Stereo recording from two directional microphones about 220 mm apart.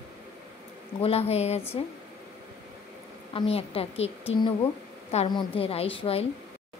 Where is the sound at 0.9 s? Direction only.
25° left (ahead or behind).